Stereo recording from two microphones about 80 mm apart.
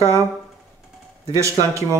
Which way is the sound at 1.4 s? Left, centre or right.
Right.